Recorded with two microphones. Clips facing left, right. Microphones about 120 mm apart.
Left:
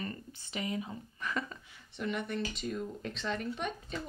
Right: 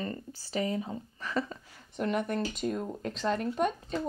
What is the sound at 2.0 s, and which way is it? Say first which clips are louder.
Speech: right 5 dB; 50° right (ahead or behind).